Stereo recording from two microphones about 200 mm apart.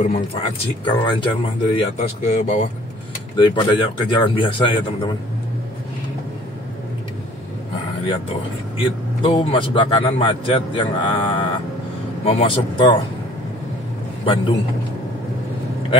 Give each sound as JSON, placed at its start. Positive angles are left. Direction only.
{"t": 0.0, "sound": "speech", "side_deg": 35}
{"t": 0.8, "sound": "speech", "side_deg": 25}
{"t": 2.0, "sound": "speech", "side_deg": 35}
{"t": 3.3, "sound": "speech", "side_deg": 25}
{"t": 8.0, "sound": "speech", "side_deg": 25}
{"t": 14.2, "sound": "speech", "side_deg": 25}